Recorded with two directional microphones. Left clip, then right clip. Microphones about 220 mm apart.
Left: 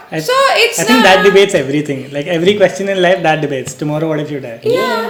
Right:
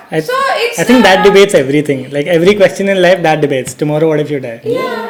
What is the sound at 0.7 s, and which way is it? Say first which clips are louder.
Speech: right 1 dB; 30° right (ahead or behind).